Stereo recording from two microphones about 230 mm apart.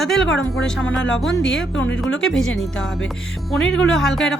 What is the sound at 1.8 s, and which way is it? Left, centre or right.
Speech, left.